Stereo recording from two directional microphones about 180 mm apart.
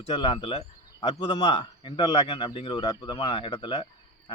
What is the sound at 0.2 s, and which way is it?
A man's voice, 30° left (ahead or behind).